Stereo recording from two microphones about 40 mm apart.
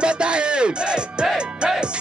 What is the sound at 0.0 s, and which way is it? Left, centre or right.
Music, right.